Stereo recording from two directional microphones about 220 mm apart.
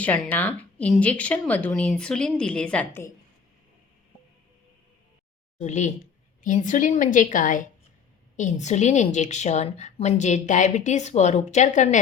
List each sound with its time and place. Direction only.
0.0 s speech: 5° left (ahead or behind)
5.5 s a woman's voice: 30° left (ahead or behind)